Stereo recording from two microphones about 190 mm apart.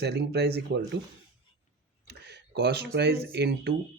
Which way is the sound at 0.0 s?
60° right (ahead or behind).